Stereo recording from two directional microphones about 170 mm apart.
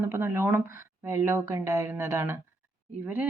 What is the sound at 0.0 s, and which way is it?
Speech, 15° right (ahead or behind).